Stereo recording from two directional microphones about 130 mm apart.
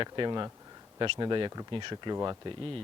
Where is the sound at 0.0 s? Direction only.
35° right (ahead or behind).